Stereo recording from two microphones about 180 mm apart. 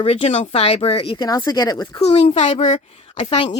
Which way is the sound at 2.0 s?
35° left (ahead or behind).